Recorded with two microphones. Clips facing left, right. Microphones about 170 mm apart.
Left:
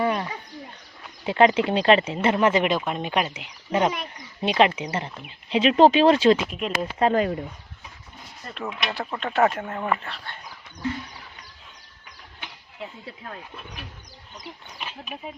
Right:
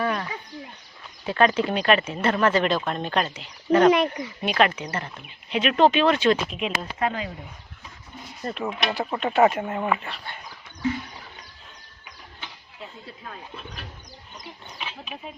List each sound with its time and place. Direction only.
0.0 s a sound: 20° left (ahead or behind)
1.2 s speech: 20° left (ahead or behind)
3.9 s speech: 75° right (ahead or behind)
4.4 s speech: 20° left (ahead or behind)
6.5 s speech: centre (ahead or behind)
7.0 s speech: 35° left (ahead or behind)
8.5 s speech: 5° right (ahead or behind)
14.3 s speech: centre (ahead or behind)